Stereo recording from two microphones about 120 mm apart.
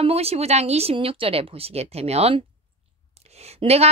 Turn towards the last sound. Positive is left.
turn(degrees=-60)  # may be behind; listen again after turning